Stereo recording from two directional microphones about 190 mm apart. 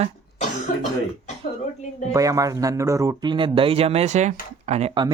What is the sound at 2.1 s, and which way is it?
Speech, 15° right (ahead or behind).